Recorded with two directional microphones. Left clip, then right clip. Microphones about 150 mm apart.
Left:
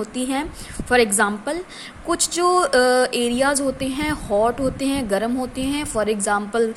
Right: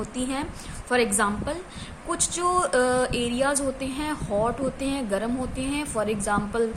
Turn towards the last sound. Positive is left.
turn(degrees=40)  # may be behind; listen again after turning